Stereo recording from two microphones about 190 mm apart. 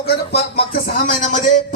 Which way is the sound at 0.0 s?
55° left (ahead or behind).